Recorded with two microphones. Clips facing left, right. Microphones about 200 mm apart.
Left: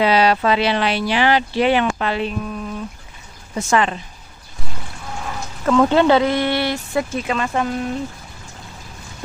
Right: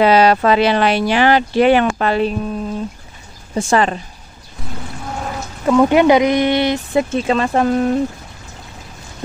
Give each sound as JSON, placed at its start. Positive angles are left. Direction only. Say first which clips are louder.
{"t": 0.0, "sound": "speech", "louder": "right 4 dB", "side_deg": -45}
{"t": 2.4, "sound": "speech", "louder": "right 5 dB", "side_deg": -30}
{"t": 5.7, "sound": "speech", "louder": "right 3 dB", "side_deg": -15}